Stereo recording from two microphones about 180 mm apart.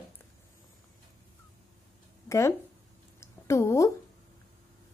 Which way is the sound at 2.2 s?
15° left (ahead or behind).